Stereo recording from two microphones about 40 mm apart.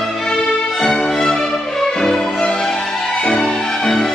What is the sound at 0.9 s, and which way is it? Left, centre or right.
Music, centre.